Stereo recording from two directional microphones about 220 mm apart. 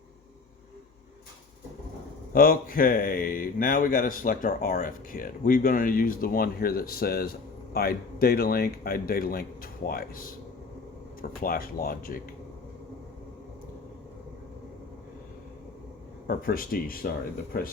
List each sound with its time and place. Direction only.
2.3 s speech: 40° left (ahead or behind)
16.2 s speech: 40° left (ahead or behind)